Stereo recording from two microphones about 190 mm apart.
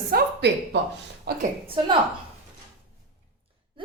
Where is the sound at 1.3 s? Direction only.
55° right (ahead or behind).